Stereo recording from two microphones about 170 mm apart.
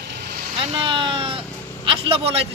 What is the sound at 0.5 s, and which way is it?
Speech, 35° right (ahead or behind).